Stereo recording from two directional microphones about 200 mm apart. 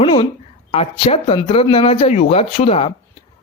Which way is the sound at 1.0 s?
30° left (ahead or behind).